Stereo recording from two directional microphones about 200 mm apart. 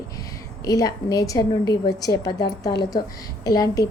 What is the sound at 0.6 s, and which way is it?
A woman's voice, 15° left (ahead or behind).